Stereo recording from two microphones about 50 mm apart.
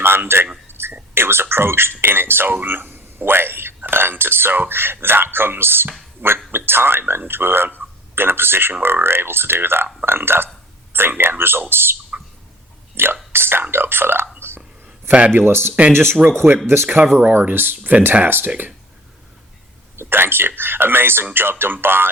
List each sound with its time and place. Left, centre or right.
0.0 s a sound: right
1.1 s speech: right
13.0 s speech: right
14.3 s hiccup: right
15.3 s speech: right
17.2 s speech: right
20.0 s speech: right